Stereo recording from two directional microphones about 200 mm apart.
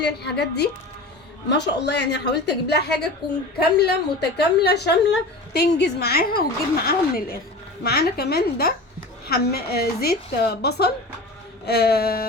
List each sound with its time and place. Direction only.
0.0 s a woman's voice: 55° left (ahead or behind)